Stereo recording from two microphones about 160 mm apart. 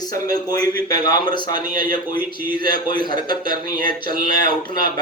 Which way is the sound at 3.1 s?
25° left (ahead or behind).